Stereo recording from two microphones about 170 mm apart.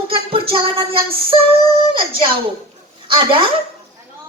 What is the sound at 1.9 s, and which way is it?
A woman's voice, 30° right (ahead or behind).